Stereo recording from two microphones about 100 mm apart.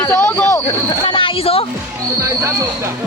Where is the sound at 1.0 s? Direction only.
60° left (ahead or behind).